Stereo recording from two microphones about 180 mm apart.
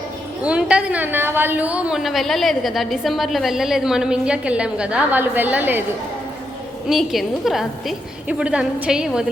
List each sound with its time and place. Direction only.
0.4 s a woman's voice: 5° right (ahead or behind)
6.8 s a woman's voice: centre (ahead or behind)